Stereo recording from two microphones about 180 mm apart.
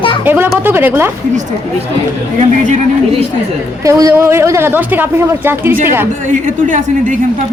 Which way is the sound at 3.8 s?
20° right (ahead or behind).